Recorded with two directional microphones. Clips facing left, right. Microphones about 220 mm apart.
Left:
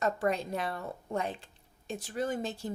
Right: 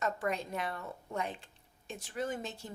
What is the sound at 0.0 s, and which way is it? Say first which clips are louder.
Speech: left 5 dB; 35° left (ahead or behind).